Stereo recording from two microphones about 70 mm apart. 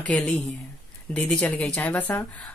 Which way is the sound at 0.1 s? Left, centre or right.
Centre.